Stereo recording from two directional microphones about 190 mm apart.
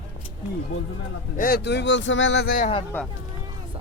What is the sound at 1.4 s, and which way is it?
Speech, 50° left (ahead or behind).